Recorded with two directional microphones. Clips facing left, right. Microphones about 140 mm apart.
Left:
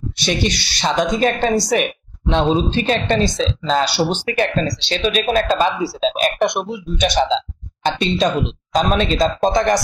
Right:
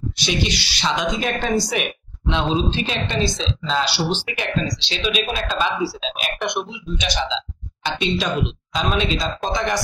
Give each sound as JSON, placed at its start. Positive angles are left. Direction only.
{"t": 0.2, "sound": "speech", "side_deg": 50}